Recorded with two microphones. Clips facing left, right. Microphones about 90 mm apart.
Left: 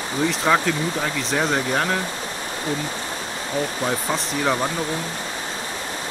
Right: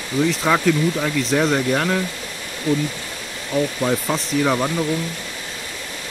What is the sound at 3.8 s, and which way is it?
Speech, 5° left (ahead or behind).